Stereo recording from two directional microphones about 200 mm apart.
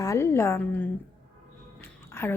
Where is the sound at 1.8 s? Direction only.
10° left (ahead or behind).